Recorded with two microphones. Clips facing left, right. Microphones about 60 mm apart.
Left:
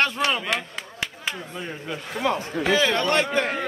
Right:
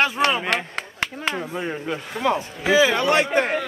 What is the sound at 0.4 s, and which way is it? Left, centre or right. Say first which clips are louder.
Speech: right 3 dB; right.